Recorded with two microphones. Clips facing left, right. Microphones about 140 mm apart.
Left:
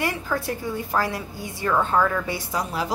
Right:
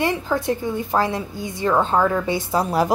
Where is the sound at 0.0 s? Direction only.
20° right (ahead or behind).